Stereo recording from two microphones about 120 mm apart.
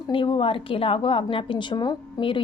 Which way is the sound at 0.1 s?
45° left (ahead or behind).